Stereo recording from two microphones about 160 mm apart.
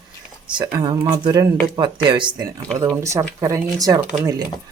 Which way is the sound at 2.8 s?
20° right (ahead or behind).